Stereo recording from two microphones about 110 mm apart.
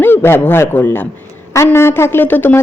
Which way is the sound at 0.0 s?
20° left (ahead or behind).